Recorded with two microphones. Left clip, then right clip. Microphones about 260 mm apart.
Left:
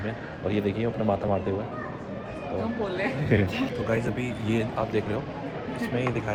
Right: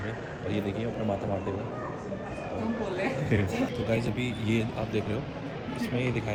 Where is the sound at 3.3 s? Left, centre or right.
Left.